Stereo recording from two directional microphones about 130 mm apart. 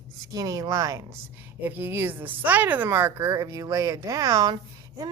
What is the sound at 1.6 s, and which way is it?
Speech, 15° right (ahead or behind).